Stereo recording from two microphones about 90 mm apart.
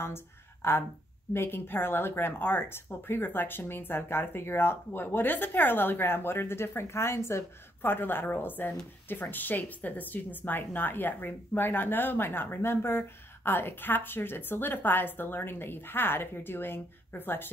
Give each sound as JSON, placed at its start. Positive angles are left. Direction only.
{"t": 0.0, "sound": "speech", "side_deg": 25}